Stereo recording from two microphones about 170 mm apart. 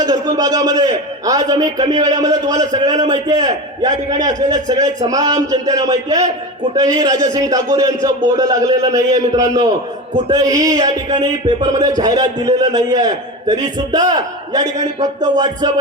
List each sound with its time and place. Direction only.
0.0 s a man's voice: 20° right (ahead or behind)